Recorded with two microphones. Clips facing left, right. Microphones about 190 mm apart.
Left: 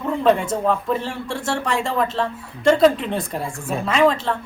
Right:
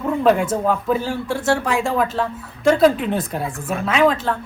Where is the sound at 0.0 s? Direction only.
5° right (ahead or behind).